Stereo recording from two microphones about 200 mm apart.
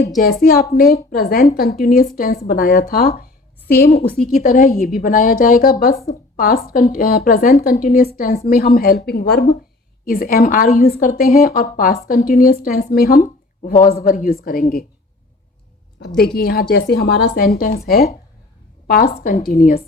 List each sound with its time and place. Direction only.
0.4 s a woman's voice: 45° left (ahead or behind)
16.0 s a woman's voice: 50° left (ahead or behind)